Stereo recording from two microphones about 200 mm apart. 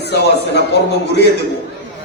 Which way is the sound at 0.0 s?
55° left (ahead or behind).